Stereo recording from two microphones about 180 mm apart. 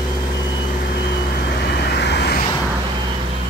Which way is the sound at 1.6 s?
65° left (ahead or behind).